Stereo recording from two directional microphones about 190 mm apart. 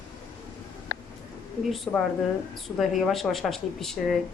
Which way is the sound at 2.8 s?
Centre (ahead or behind).